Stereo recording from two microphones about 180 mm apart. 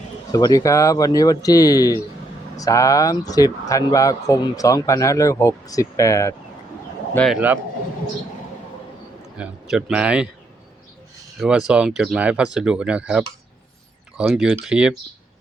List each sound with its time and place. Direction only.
0.3 s speech: 20° left (ahead or behind)
7.3 s a man's voice: 10° right (ahead or behind)
9.4 s speech: 5° right (ahead or behind)
11.3 s speech: 5° right (ahead or behind)